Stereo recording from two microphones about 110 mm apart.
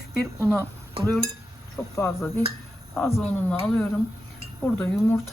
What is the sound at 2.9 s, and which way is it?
Speech, centre (ahead or behind).